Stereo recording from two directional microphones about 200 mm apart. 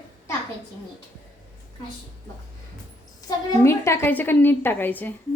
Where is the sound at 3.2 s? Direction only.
15° left (ahead or behind).